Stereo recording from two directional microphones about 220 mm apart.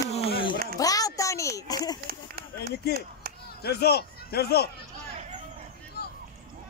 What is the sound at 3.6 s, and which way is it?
A man's voice, 45° left (ahead or behind).